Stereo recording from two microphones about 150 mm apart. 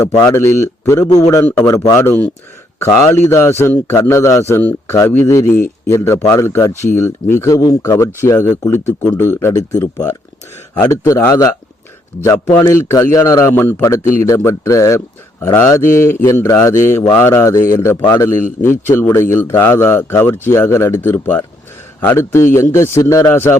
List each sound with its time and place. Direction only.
0.2 s speech: 20° left (ahead or behind)